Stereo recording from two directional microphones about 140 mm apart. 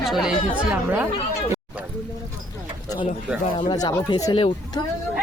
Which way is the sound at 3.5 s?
30° left (ahead or behind).